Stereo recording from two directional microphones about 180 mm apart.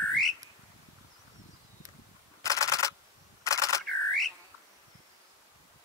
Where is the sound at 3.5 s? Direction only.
20° left (ahead or behind).